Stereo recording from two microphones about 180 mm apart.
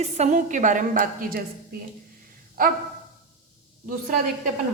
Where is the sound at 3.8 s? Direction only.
50° right (ahead or behind).